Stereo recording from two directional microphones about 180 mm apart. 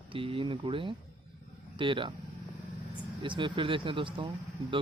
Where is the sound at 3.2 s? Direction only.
25° right (ahead or behind).